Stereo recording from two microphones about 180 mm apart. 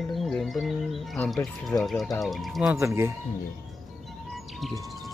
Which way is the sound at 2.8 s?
15° right (ahead or behind).